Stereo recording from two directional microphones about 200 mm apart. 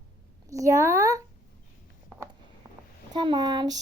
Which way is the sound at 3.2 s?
25° right (ahead or behind).